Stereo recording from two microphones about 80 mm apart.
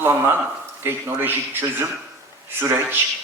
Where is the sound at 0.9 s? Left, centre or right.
Right.